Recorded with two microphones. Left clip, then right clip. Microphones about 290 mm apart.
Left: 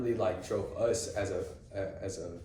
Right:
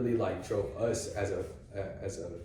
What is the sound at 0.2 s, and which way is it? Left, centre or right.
A man's voice, centre.